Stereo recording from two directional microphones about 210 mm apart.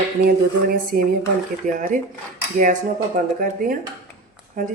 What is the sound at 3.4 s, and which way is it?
Speech, 40° right (ahead or behind).